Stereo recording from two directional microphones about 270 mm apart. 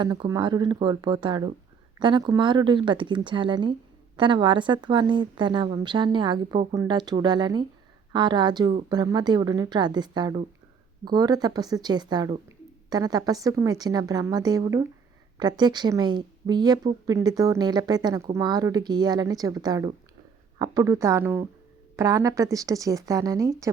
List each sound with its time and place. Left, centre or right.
0.0 s speech: centre